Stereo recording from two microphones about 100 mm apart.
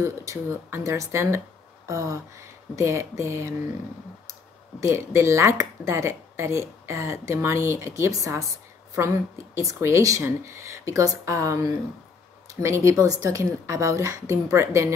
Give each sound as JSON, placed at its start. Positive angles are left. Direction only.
{"t": 0.0, "sound": "speech", "side_deg": -30}